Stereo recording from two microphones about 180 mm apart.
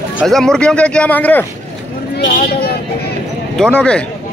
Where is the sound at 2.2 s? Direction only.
60° left (ahead or behind).